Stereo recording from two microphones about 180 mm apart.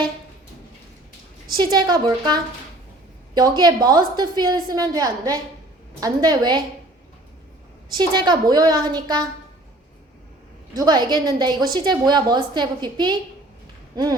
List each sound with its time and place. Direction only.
1.5 s a woman's voice: 25° right (ahead or behind)
7.9 s a woman's voice: 25° right (ahead or behind)
10.8 s a woman's voice: 20° right (ahead or behind)